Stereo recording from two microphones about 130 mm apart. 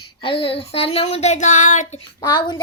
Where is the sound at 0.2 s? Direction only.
45° left (ahead or behind); by 2.0 s 70° left (ahead or behind).